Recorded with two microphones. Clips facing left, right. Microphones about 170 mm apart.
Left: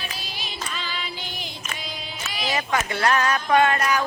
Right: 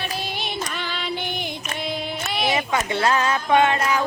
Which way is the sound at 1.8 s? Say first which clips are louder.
Right 8 dB; 60° right (ahead or behind).